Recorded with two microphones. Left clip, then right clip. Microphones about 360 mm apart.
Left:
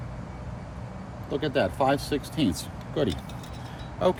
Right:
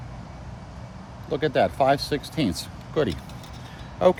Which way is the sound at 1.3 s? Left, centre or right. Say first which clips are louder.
Right 4 dB; right.